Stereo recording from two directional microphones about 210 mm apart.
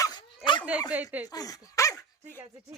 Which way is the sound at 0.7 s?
5° right (ahead or behind).